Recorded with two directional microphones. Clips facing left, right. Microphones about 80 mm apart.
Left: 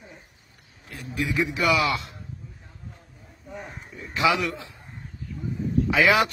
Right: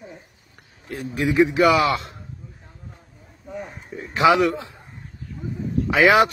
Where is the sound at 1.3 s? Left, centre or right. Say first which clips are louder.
Right 8 dB; right.